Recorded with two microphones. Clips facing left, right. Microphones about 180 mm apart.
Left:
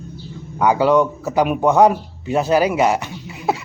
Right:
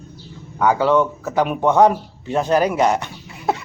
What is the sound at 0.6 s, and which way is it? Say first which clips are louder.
Speech: left 1 dB; 10° left (ahead or behind).